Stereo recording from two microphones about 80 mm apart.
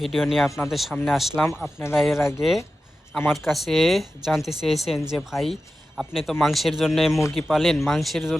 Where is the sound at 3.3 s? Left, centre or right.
Centre.